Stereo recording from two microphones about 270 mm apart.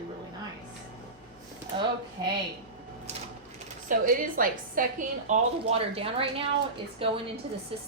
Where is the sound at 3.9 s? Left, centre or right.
Right.